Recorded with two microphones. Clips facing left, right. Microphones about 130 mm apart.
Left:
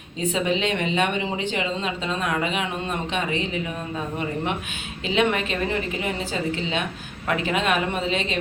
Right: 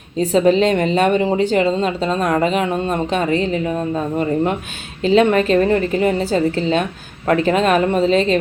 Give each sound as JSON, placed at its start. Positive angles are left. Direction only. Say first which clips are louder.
{"t": 0.2, "sound": "a woman's voice", "louder": "right 10 dB", "side_deg": -40}